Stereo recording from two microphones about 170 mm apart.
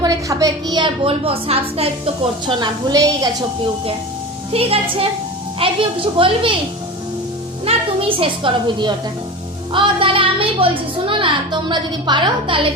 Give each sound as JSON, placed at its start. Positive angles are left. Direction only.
{"t": 0.0, "sound": "a woman's voice", "side_deg": -20}
{"t": 2.5, "sound": "a woman's voice", "side_deg": -25}
{"t": 4.5, "sound": "a woman's voice", "side_deg": -35}
{"t": 7.6, "sound": "a woman's voice", "side_deg": -35}